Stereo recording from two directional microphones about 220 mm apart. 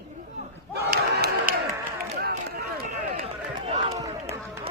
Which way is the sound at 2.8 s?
30° right (ahead or behind).